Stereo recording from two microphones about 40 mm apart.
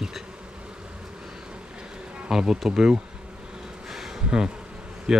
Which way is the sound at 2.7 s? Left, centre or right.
Centre.